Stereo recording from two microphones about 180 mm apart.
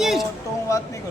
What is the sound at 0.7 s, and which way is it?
Speech, 15° left (ahead or behind).